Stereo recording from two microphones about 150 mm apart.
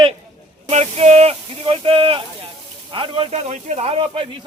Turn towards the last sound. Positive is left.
turn(degrees=-40)  # may be behind; listen again after turning